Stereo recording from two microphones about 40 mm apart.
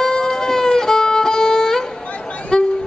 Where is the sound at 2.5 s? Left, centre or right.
Left.